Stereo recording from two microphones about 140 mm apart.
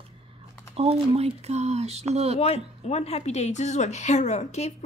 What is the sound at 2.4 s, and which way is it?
A woman's voice, 45° left (ahead or behind).